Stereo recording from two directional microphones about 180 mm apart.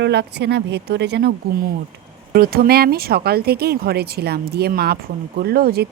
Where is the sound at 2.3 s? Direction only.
55° right (ahead or behind).